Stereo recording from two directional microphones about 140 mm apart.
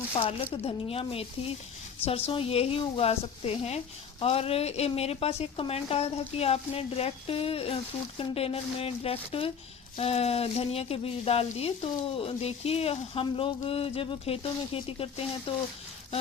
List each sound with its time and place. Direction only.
0.2 s speech: 45° left (ahead or behind)